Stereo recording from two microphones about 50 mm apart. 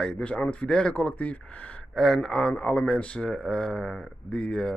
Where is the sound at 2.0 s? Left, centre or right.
Centre.